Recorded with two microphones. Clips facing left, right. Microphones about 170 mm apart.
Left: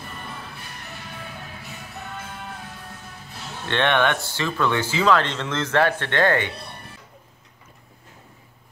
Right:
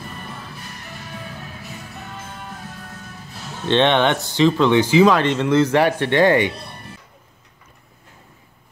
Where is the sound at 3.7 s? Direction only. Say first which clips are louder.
Right 5 dB; 20° right (ahead or behind).